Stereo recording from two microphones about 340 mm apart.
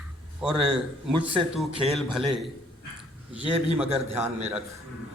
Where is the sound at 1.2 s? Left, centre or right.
Centre.